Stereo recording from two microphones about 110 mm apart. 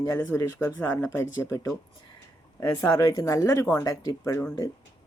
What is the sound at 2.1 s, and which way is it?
Speech, 35° left (ahead or behind).